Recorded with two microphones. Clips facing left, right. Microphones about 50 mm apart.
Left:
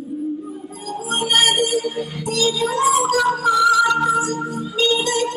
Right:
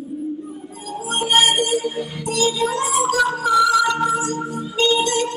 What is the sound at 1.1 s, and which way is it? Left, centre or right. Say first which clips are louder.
Music: right 1 dB; right.